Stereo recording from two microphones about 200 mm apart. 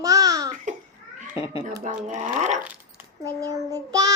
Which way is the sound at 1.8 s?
35° right (ahead or behind).